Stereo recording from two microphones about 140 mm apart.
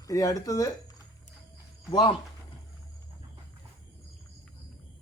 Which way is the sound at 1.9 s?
30° left (ahead or behind).